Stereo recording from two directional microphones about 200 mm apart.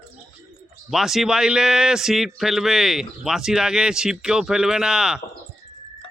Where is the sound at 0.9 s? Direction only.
Centre (ahead or behind).